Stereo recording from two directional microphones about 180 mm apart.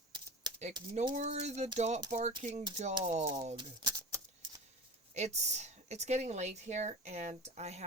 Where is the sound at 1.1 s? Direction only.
40° right (ahead or behind).